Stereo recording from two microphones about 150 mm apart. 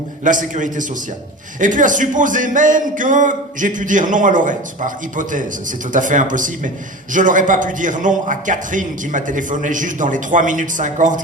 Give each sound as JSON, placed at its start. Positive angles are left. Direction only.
{"t": 0.3, "sound": "a man's voice", "side_deg": -60}